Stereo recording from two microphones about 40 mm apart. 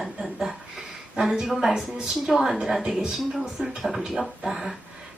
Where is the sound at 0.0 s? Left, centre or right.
Centre.